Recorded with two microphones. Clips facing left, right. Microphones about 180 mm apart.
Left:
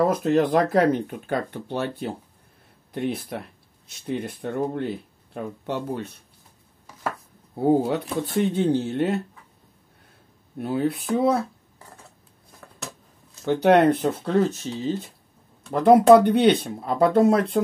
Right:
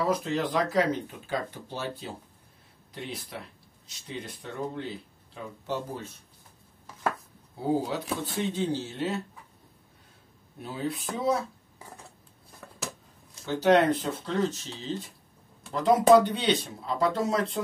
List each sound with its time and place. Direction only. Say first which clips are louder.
0.0 s speech: left 8 dB; 50° left (ahead or behind); by 6.2 s 65° left (ahead or behind)
7.5 s speech: left 8 dB; 55° left (ahead or behind)
10.6 s speech: left 9 dB; 60° left (ahead or behind)
12.5 s a sound: even; 5° right (ahead or behind)
13.5 s speech: left 5 dB; 60° left (ahead or behind)
15.7 s speech: left 6 dB; 55° left (ahead or behind)